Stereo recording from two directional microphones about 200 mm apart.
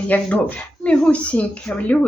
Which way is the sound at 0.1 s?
5° left (ahead or behind).